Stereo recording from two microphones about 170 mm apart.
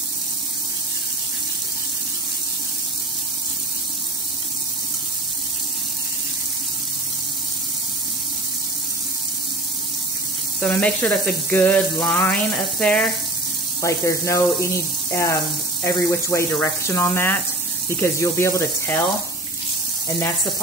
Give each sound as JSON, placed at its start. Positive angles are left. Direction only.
{"t": 10.6, "sound": "speech", "side_deg": 10}
{"t": 13.8, "sound": "speech", "side_deg": 15}